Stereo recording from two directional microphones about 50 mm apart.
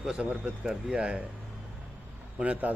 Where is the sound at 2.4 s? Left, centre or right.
Right.